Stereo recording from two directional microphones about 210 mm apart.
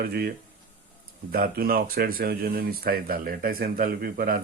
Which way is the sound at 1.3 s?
45° right (ahead or behind).